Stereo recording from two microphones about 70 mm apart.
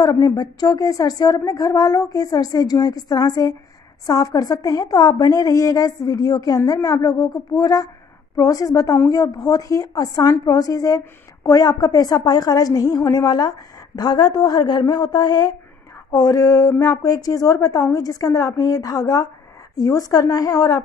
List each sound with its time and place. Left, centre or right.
0.0 s speech: left
5.2 s a woman's voice: left
13.3 s a woman's voice: left
16.1 s speech: left